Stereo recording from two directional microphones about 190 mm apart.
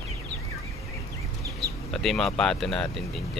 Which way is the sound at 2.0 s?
Centre (ahead or behind).